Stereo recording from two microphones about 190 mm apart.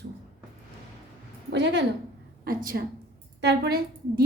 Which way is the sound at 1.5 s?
65° right (ahead or behind).